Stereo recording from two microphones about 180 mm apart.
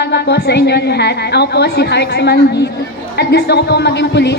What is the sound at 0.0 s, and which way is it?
A woman's voice, 70° left (ahead or behind).